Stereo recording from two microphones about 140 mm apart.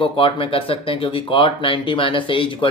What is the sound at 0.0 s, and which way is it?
Speech, 40° left (ahead or behind).